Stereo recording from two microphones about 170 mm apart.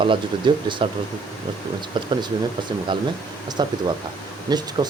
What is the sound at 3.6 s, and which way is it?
Speech, 25° right (ahead or behind).